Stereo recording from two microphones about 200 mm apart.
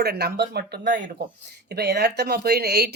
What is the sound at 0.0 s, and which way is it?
Speech, 55° right (ahead or behind).